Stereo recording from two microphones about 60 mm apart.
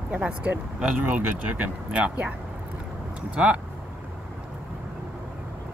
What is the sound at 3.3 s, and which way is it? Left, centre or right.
Speech, right.